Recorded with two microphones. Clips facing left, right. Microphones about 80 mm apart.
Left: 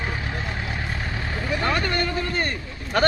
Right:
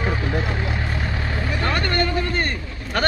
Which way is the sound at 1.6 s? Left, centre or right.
Centre.